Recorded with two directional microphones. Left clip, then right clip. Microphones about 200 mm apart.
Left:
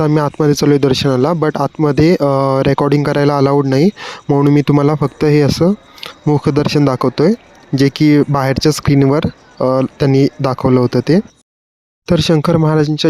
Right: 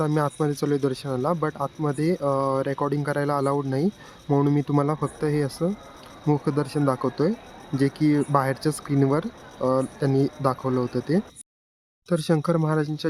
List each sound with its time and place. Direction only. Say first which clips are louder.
0.0 s speech: left 11 dB; 45° left (ahead or behind)